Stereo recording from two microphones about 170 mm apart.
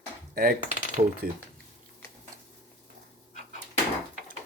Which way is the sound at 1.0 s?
40° right (ahead or behind).